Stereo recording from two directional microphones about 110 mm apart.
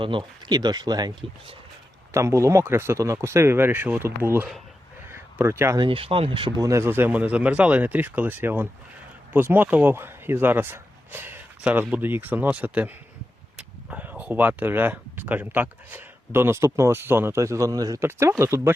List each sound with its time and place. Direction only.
0.0 s speech: 50° right (ahead or behind)
2.1 s speech: 25° right (ahead or behind)
5.0 s a sound: 20° right (ahead or behind)
5.8 s speech: 55° right (ahead or behind)
6.6 s speech: 25° right (ahead or behind)